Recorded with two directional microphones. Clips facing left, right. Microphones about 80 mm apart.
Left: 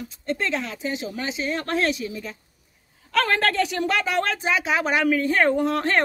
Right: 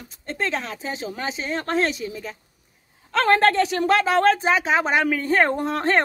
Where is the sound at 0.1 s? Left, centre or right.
Right.